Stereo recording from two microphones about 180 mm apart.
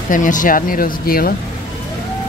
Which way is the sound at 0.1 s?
45° left (ahead or behind).